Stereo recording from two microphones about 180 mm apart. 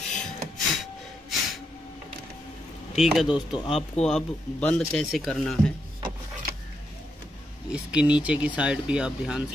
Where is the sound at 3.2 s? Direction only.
30° left (ahead or behind).